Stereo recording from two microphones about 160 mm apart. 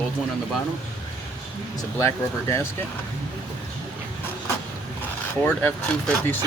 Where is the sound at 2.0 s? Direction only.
20° left (ahead or behind).